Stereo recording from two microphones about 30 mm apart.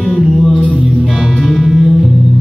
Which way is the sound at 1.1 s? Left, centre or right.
Centre.